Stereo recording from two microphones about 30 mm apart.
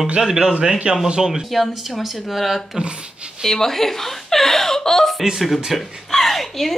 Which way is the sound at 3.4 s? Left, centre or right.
Centre.